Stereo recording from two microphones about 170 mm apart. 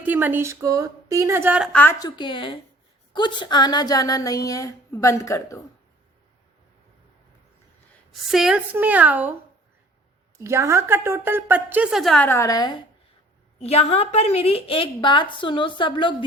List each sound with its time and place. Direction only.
0.0 s a woman's voice: 10° right (ahead or behind)
1.7 s a woman's voice: 10° left (ahead or behind)
2.0 s speech: 25° left (ahead or behind)
8.3 s a woman's voice: centre (ahead or behind)
10.3 s a woman's voice: 15° right (ahead or behind); by 12.8 s 25° left (ahead or behind)
13.6 s a woman's voice: 40° left (ahead or behind)